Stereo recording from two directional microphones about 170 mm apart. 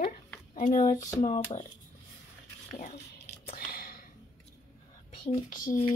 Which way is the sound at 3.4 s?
60° left (ahead or behind).